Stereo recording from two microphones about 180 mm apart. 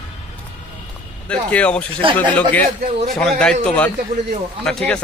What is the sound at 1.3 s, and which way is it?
A man's voice, 5° left (ahead or behind).